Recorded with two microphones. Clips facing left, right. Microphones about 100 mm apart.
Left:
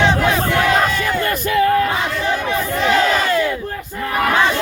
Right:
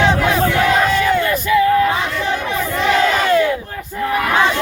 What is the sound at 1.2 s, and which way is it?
Crowd, 50° left (ahead or behind).